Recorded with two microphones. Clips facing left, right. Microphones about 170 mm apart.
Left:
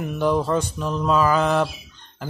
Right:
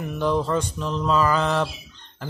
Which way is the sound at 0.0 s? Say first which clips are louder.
Left 2 dB; 10° left (ahead or behind).